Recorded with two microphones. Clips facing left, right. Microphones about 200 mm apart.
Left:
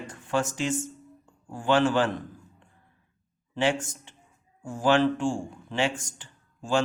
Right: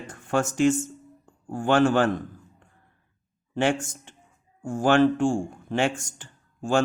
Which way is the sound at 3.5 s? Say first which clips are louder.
Right 2 dB; 50° right (ahead or behind).